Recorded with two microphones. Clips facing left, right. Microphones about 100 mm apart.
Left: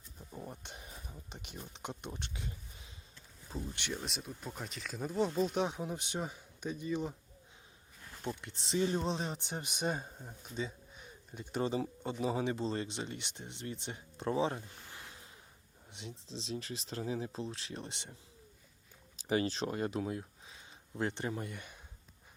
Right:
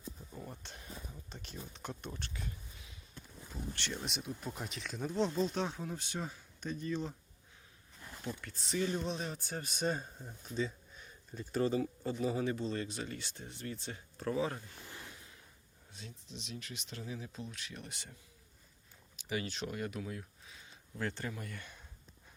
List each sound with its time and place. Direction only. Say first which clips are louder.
0.3 s a sound: left 2 dB; 15° left (ahead or behind)
3.8 s speech: even; 10° left (ahead or behind)
4.0 s speech: right 2 dB; centre (ahead or behind)
8.2 s speech: left 3 dB; 25° left (ahead or behind)
15.9 s speech: left 4 dB; 20° left (ahead or behind)